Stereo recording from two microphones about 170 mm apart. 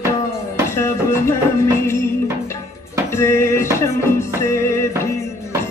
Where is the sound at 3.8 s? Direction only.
15° left (ahead or behind).